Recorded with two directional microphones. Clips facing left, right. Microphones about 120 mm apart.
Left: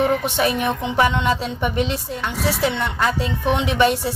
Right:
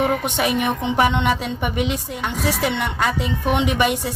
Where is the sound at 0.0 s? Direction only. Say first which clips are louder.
Left 1 dB; 15° right (ahead or behind).